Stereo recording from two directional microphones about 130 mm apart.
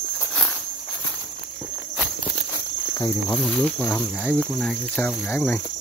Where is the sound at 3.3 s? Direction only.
10° left (ahead or behind).